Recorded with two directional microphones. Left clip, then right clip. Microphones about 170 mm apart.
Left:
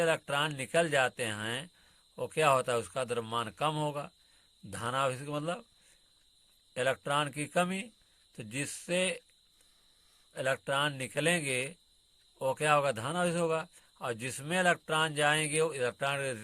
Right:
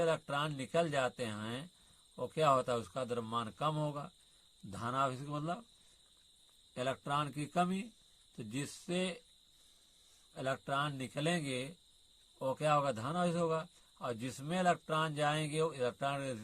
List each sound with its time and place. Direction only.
0.0 s speech: 35° left (ahead or behind)
6.7 s speech: 35° left (ahead or behind)
10.3 s speech: 35° left (ahead or behind)